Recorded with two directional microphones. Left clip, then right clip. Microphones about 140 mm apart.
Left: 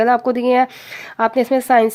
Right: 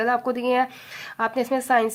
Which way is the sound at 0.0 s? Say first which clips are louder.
Left 8 dB; 45° left (ahead or behind).